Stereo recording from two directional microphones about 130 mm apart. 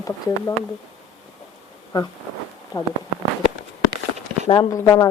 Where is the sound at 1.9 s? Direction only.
30° left (ahead or behind).